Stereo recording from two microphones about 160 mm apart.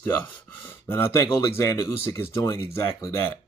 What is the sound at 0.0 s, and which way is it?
Speech, 10° left (ahead or behind).